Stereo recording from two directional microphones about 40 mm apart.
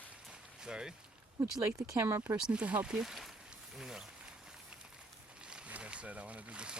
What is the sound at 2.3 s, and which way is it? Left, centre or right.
Speech, right.